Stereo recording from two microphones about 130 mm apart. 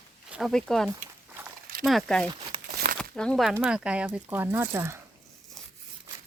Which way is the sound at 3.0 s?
5° left (ahead or behind).